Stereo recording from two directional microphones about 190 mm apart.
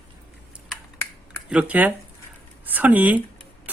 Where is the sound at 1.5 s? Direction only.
5° right (ahead or behind).